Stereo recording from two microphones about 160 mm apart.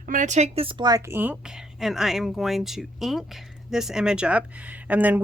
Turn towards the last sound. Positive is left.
turn(degrees=-10)  # may be behind; listen again after turning